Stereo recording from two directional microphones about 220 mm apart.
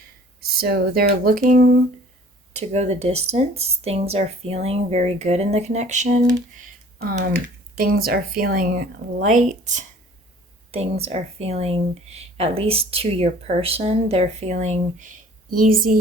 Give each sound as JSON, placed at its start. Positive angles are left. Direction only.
{"t": 0.5, "sound": "speech", "side_deg": -45}